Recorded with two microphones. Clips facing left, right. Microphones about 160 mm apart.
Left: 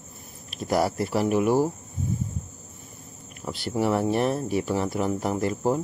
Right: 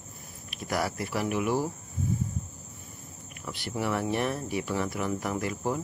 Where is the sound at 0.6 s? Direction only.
30° left (ahead or behind).